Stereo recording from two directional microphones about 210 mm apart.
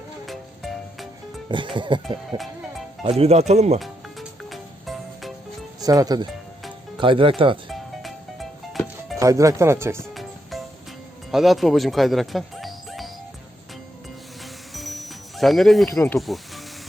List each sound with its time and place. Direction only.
0.3 s music: centre (ahead or behind)
1.5 s speech: 25° right (ahead or behind)
3.8 s music: centre (ahead or behind)
5.8 s speech: 15° right (ahead or behind)
7.7 s music: centre (ahead or behind)
9.1 s speech: 15° right (ahead or behind)
11.3 s speech: centre (ahead or behind)
14.7 s music: centre (ahead or behind)
16.1 s speech: centre (ahead or behind)